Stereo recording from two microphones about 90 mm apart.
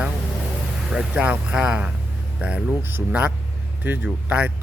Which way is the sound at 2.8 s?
25° right (ahead or behind).